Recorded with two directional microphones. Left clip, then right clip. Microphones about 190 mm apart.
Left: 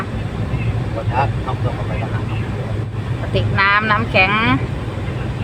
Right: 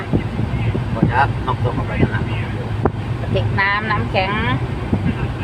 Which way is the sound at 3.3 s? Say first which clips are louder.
Left 3 dB; 20° left (ahead or behind).